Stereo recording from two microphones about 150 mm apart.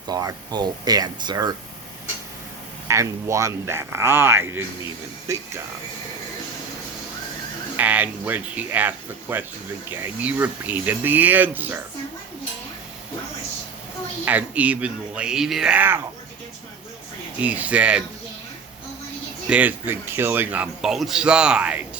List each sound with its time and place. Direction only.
0.1 s speech: 25° right (ahead or behind)
2.8 s a man's voice: 20° right (ahead or behind)
7.8 s a man's voice: 10° right (ahead or behind)
14.3 s a man's voice: 10° right (ahead or behind)
17.4 s a man's voice: 10° right (ahead or behind)
19.5 s a man's voice: 10° right (ahead or behind)